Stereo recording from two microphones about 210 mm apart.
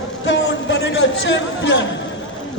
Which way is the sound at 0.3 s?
60° left (ahead or behind).